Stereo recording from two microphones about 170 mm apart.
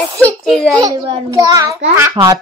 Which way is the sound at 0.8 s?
20° right (ahead or behind).